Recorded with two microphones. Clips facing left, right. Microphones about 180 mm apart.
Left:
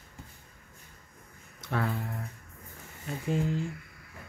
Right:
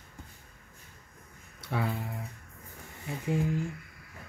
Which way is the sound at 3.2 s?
20° left (ahead or behind).